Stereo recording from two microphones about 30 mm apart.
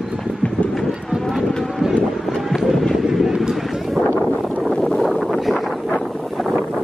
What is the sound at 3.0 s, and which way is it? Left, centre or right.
Vehicle, centre.